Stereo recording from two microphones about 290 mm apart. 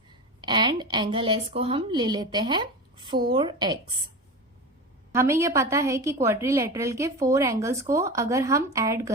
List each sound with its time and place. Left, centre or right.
0.4 s a woman's voice: centre
5.1 s a woman's voice: centre